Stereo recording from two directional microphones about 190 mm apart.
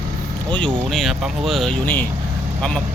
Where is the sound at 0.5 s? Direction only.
5° left (ahead or behind).